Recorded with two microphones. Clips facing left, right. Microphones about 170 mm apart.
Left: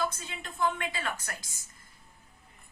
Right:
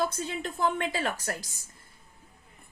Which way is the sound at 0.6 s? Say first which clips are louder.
Right 2 dB; 35° right (ahead or behind).